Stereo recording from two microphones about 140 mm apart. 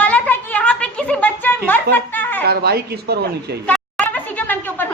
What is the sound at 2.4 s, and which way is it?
Speech, 90° right.